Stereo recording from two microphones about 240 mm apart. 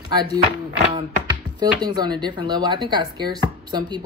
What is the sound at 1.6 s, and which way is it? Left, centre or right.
Speech, centre.